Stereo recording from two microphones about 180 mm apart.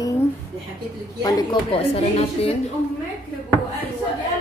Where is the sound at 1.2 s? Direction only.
20° left (ahead or behind).